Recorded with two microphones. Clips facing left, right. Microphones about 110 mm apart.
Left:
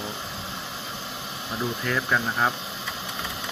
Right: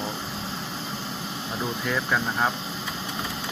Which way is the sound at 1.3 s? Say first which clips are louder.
Left 2 dB; 35° right (ahead or behind).